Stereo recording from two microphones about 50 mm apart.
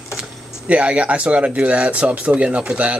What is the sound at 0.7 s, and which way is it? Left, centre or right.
Speech, right.